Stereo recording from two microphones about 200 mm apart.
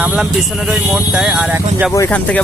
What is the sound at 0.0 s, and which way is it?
Speech, 5° right (ahead or behind).